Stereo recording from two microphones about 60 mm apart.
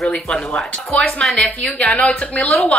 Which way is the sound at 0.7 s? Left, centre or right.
Left.